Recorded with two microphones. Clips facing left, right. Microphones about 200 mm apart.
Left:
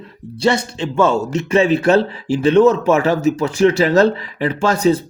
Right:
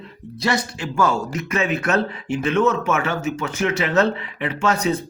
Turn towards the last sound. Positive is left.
turn(degrees=30)  # may be behind; listen again after turning